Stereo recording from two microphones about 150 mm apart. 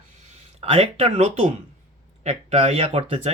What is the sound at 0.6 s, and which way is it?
Speech, 40° right (ahead or behind).